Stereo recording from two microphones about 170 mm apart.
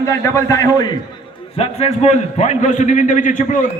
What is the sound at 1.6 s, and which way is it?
A man's voice, 35° left (ahead or behind).